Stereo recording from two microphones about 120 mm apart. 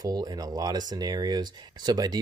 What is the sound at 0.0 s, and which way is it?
Speech, 35° right (ahead or behind).